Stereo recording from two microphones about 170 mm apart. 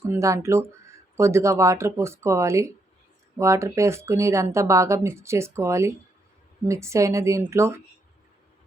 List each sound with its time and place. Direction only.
0.0 s speech: 15° right (ahead or behind)